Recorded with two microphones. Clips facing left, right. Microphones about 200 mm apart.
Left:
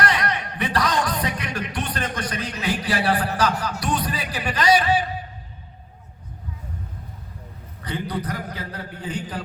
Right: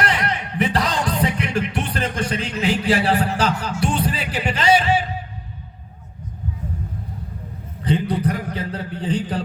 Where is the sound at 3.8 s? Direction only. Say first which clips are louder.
Right 3 dB; 25° right (ahead or behind).